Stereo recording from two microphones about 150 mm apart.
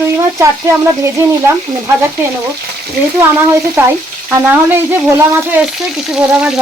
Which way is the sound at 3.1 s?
15° right (ahead or behind).